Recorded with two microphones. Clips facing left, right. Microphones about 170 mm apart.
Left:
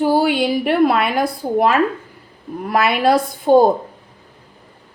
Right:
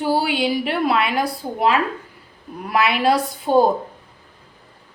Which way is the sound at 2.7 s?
45° left (ahead or behind).